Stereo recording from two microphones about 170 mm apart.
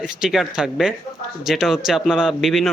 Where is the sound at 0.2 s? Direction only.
Centre (ahead or behind).